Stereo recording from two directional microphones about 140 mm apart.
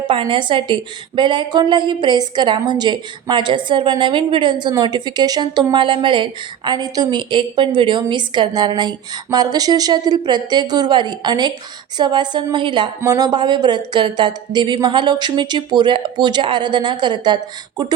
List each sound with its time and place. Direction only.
0.1 s speech: 35° right (ahead or behind)